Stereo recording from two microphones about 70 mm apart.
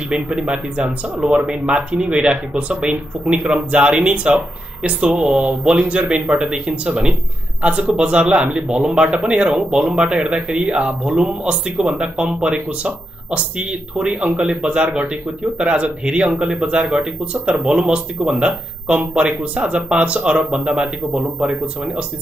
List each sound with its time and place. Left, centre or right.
0.3 s speech: centre
1.2 s speech: centre
1.7 s speech: centre